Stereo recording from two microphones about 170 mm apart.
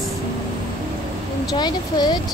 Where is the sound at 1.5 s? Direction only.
25° left (ahead or behind).